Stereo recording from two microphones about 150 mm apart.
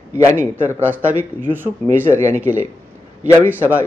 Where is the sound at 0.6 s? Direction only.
10° right (ahead or behind).